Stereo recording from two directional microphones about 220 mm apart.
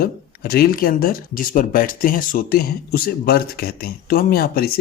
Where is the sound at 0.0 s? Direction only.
45° left (ahead or behind).